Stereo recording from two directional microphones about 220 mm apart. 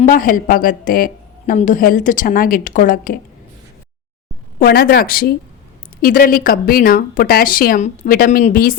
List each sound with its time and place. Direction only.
0.0 s a woman's voice: 35° left (ahead or behind)
4.6 s a woman's voice: 45° left (ahead or behind)